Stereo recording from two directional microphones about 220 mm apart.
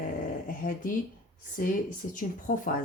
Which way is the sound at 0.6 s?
40° left (ahead or behind).